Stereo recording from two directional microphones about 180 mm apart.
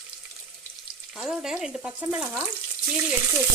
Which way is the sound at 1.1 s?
Centre (ahead or behind).